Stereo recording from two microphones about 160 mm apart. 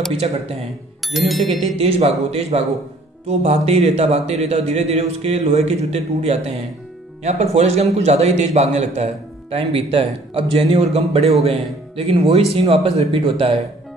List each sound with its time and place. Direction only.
1.0 s speech: centre (ahead or behind)
1.8 s a man's voice: 40° right (ahead or behind)